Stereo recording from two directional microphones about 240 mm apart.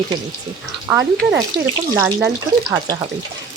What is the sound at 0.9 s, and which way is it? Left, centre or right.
Speech, centre.